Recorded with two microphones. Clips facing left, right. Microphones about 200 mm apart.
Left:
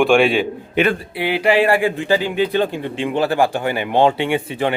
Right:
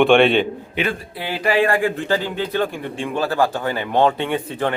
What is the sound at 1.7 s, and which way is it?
A man's voice, 10° left (ahead or behind).